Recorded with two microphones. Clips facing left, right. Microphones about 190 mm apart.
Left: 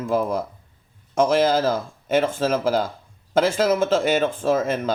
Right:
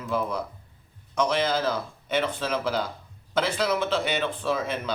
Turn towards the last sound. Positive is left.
turn(degrees=45)  # may be behind; listen again after turning